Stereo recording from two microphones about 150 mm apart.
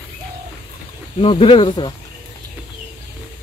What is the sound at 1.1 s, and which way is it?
Speech, 40° left (ahead or behind).